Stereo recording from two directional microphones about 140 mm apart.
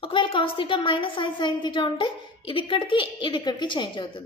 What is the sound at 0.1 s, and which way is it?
A woman's voice, 35° left (ahead or behind).